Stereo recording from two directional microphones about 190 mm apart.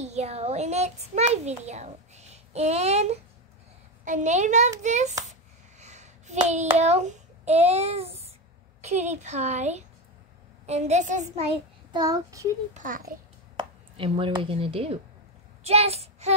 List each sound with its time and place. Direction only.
0.0 s a child's voice: 35° right (ahead or behind)
5.8 s a sound: 35° right (ahead or behind)
6.4 s a child's voice: 40° right (ahead or behind)
6.8 s child singing: 35° right (ahead or behind)
8.8 s a child's voice: 35° right (ahead or behind)
11.9 s a child's voice: 20° right (ahead or behind)
12.7 s a child's voice: 45° right (ahead or behind)
13.6 s a child's voice: 25° right (ahead or behind)